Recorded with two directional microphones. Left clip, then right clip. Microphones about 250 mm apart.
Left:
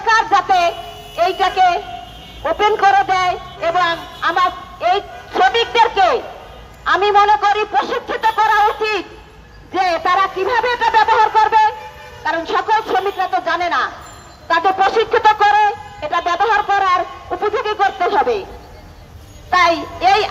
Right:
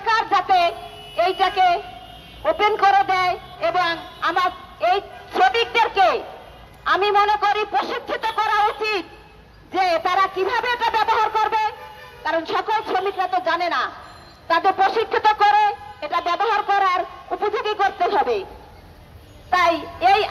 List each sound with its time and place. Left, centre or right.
0.0 s a sound: right
2.4 s a man's voice: right
19.5 s child singing: right